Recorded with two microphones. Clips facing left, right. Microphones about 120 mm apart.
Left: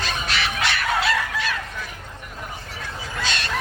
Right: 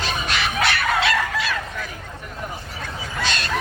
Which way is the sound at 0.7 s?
90° right.